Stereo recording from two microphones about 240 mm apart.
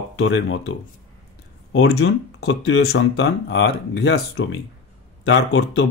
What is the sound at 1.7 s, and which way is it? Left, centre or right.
Speech, left.